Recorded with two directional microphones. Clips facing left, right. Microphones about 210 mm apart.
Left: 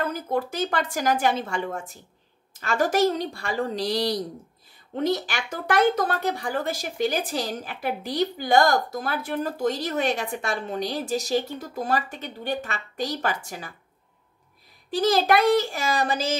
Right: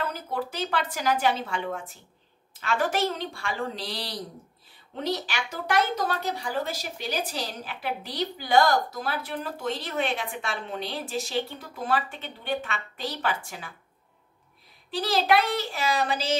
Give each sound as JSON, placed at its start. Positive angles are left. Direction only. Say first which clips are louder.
{"t": 0.0, "sound": "a woman's voice", "louder": "left 5 dB", "side_deg": 45}
{"t": 14.9, "sound": "speech", "louder": "left 3 dB", "side_deg": 45}